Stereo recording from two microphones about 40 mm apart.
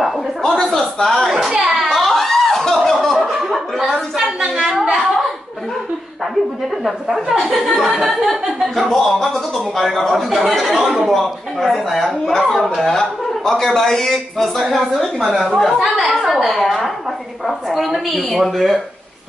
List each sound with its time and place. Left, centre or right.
0.5 s a man's voice: centre
1.6 s a sound: centre
3.4 s chuckle: centre
4.2 s a sound: centre
6.8 s a man's voice: centre
8.7 s a man's voice: centre